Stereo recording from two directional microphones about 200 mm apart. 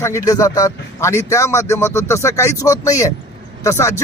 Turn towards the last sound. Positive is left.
turn(degrees=15)  # may be behind; listen again after turning